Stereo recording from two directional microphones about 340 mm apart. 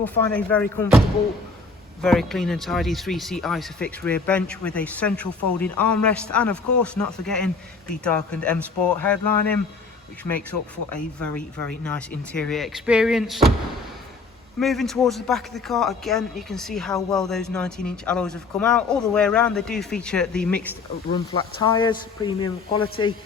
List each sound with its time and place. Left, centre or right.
0.0 s a man's voice: centre
10.5 s speech: left
10.9 s a man's voice: centre
14.6 s a man's voice: centre
21.3 s speech: centre